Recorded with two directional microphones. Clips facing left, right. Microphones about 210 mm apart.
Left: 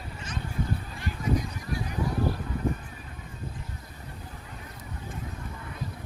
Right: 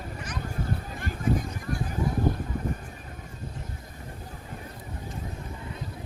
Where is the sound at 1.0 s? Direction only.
50° right (ahead or behind).